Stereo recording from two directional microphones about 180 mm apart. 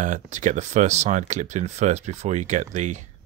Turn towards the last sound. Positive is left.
turn(degrees=-40)  # may be behind; listen again after turning